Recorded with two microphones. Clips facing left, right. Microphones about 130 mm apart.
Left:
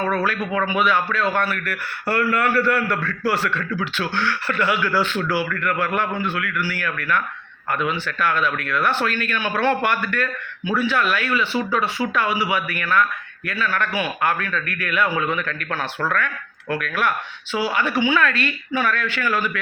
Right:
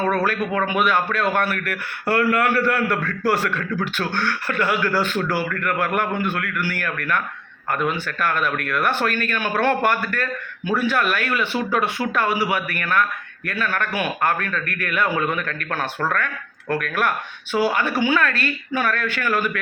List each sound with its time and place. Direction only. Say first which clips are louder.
0.3 s speech: right 1 dB; 50° right (ahead or behind)